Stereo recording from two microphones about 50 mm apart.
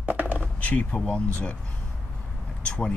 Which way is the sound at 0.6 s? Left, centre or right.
Left.